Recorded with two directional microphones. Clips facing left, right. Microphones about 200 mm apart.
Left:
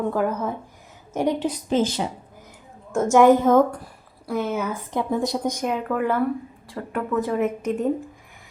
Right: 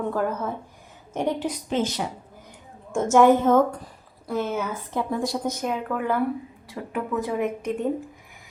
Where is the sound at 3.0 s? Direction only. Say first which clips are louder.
Left 2 dB; 10° left (ahead or behind).